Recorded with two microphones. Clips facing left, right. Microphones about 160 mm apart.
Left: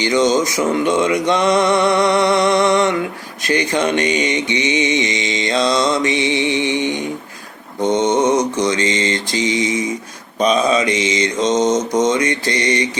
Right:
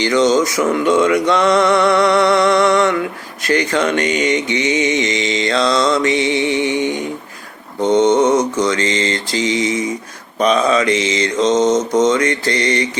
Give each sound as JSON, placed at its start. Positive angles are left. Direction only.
{"t": 0.0, "sound": "mantra", "side_deg": 20}